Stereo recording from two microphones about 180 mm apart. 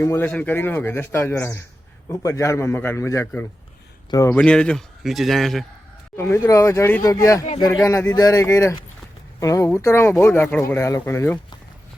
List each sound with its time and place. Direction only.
0.0 s speech: 10° left (ahead or behind)
6.1 s speech: 15° left (ahead or behind)